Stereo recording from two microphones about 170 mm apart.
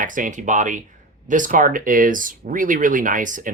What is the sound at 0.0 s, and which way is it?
Speech, 50° right (ahead or behind).